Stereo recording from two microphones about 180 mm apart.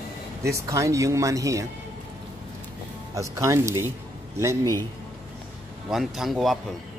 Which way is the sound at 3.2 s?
15° right (ahead or behind).